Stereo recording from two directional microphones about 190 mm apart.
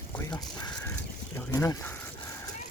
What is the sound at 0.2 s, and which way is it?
Speech, 20° left (ahead or behind).